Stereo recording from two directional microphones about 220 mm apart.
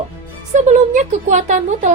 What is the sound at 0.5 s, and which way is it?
A woman's voice, 30° right (ahead or behind).